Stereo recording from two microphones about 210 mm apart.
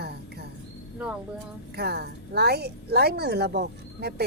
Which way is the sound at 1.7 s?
50° right (ahead or behind).